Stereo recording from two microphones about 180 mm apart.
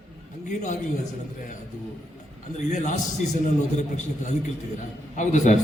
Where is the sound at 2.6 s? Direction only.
40° left (ahead or behind).